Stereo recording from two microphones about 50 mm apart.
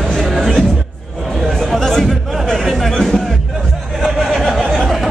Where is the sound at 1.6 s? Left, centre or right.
Centre.